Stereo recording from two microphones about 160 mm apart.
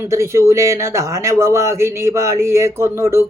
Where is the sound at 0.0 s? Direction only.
15° right (ahead or behind).